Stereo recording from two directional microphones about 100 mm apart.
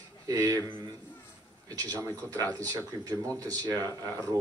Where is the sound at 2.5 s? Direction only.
35° right (ahead or behind).